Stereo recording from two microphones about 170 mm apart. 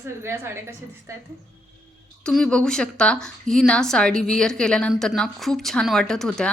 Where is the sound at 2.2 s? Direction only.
5° left (ahead or behind).